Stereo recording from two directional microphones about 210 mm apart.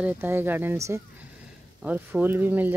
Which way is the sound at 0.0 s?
10° right (ahead or behind).